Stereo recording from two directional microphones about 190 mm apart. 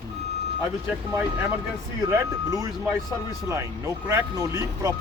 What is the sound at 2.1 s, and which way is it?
Speech, 15° right (ahead or behind).